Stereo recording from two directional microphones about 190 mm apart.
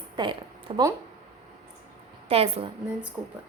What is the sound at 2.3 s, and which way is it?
Speech, 30° right (ahead or behind).